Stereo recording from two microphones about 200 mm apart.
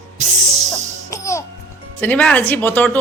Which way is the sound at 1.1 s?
15° left (ahead or behind).